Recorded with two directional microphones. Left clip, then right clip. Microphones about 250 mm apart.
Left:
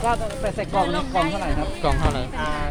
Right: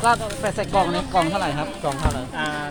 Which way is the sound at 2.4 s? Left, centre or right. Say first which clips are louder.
Right 1 dB; centre.